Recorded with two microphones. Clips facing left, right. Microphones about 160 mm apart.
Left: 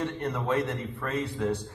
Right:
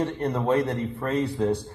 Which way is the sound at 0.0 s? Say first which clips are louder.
Right 5 dB; 35° right (ahead or behind).